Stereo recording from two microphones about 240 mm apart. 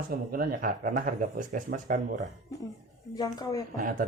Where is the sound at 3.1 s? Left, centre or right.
Centre.